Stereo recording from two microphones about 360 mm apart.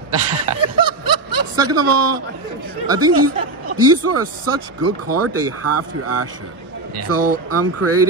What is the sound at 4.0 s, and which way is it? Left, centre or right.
Speech, right.